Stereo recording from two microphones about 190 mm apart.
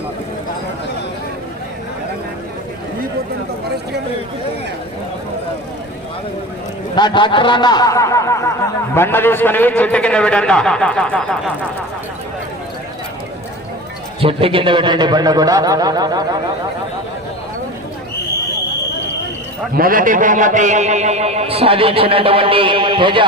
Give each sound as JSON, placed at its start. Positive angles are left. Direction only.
{"t": 6.9, "sound": "a man's voice", "side_deg": 25}
{"t": 14.2, "sound": "a man's voice", "side_deg": -30}
{"t": 19.7, "sound": "a man's voice", "side_deg": -50}